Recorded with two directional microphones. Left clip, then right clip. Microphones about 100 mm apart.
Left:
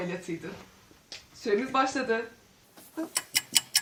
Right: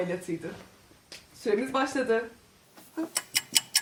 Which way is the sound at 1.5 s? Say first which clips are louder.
Left 1 dB; 25° right (ahead or behind).